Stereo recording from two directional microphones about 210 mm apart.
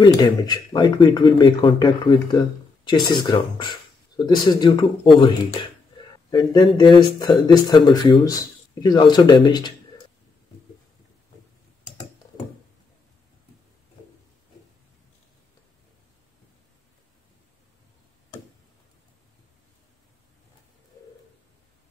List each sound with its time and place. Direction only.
0.0 s speech: 20° left (ahead or behind)